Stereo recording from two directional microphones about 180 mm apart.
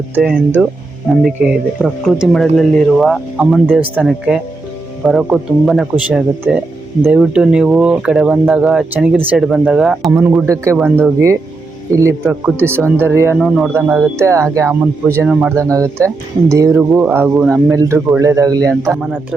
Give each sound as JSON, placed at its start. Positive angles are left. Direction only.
{"t": 0.2, "sound": "speech", "side_deg": -5}
{"t": 3.3, "sound": "speech", "side_deg": -10}
{"t": 13.3, "sound": "speech", "side_deg": 0}
{"t": 18.8, "sound": "speech", "side_deg": -10}